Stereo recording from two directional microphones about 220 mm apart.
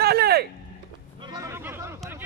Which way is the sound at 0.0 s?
45° right (ahead or behind).